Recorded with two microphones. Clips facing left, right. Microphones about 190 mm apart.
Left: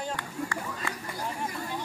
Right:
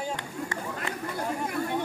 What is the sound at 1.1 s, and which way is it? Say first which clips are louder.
Speech: right 7 dB; 60° right (ahead or behind).